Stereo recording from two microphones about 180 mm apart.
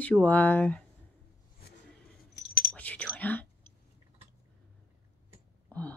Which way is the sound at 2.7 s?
5° left (ahead or behind).